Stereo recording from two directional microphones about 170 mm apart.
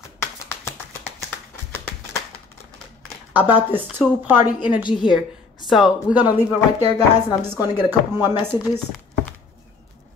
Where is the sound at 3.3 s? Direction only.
10° right (ahead or behind).